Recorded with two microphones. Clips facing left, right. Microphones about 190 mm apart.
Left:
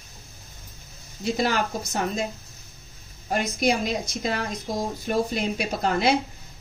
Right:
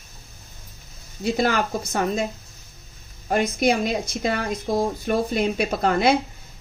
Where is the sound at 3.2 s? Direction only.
55° right (ahead or behind).